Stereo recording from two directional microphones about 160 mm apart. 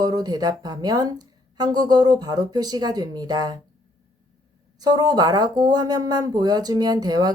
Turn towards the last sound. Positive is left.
turn(degrees=-25)  # may be behind; listen again after turning